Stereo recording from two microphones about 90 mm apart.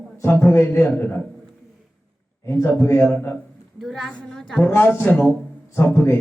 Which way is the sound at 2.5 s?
25° left (ahead or behind).